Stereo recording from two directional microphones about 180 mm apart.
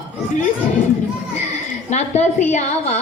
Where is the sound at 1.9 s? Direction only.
40° left (ahead or behind).